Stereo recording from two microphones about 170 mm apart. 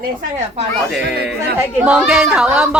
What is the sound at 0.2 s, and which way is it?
Speech, 45° right (ahead or behind).